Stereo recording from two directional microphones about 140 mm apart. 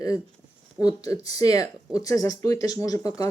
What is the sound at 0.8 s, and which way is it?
Speech, 25° left (ahead or behind).